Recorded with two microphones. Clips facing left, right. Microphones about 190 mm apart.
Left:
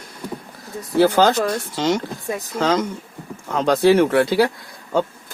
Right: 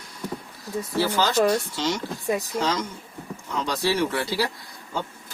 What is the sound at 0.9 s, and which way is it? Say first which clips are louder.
Speech: left 7 dB; 60° left (ahead or behind).